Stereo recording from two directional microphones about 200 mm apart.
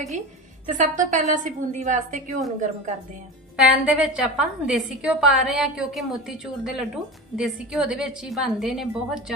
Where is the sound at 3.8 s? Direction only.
5° right (ahead or behind).